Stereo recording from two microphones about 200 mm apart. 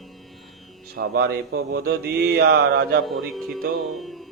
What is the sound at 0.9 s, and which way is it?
Mantra, 50° right (ahead or behind).